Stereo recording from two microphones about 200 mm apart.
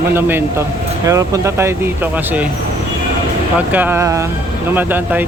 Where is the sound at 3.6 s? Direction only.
10° right (ahead or behind).